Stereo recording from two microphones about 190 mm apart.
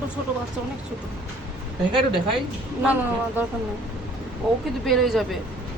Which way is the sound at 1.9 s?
25° right (ahead or behind).